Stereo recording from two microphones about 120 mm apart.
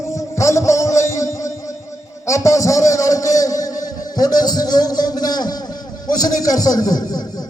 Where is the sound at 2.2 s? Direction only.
25° left (ahead or behind).